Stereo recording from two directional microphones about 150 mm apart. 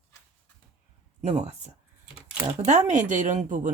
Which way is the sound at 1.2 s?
50° right (ahead or behind).